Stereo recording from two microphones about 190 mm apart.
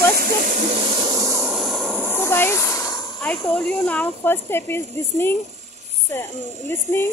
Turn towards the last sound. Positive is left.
turn(degrees=10)  # may be behind; listen again after turning